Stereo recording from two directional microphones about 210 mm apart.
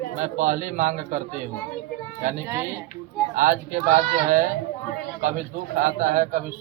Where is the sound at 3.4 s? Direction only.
40° right (ahead or behind).